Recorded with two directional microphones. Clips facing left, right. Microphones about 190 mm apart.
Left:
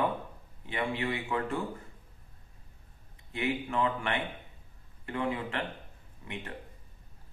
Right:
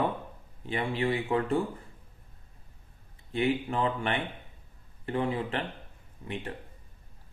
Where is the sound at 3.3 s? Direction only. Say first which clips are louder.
Right 4 dB; 30° right (ahead or behind).